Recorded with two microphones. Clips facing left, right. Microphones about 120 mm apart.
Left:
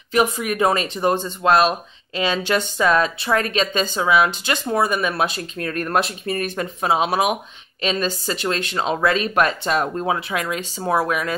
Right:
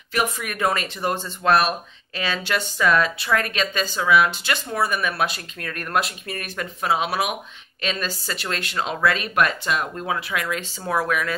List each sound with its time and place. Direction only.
0.1 s speech: 20° left (ahead or behind)